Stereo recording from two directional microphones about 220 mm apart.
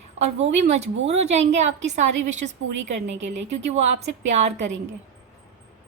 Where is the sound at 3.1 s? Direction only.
55° right (ahead or behind).